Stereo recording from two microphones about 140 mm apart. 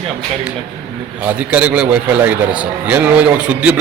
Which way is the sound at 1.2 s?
10° right (ahead or behind).